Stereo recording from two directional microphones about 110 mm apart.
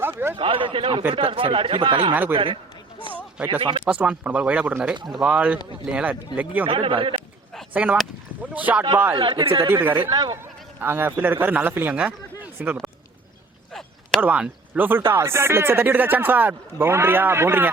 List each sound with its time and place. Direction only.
0.0 s a sound: 20° right (ahead or behind)
0.3 s speech: 50° right (ahead or behind)
3.1 s a sound: 15° right (ahead or behind)
3.6 s speech: 50° right (ahead or behind)
3.8 s speech: 10° right (ahead or behind)
6.7 s speech: 55° right (ahead or behind)
7.7 s speech: 15° right (ahead or behind)
9.1 s speech: 50° right (ahead or behind)
9.6 s speech: 20° right (ahead or behind)
10.1 s speech: 35° right (ahead or behind)
10.3 s a man's voice: 20° right (ahead or behind)
14.2 s speech: 10° right (ahead or behind)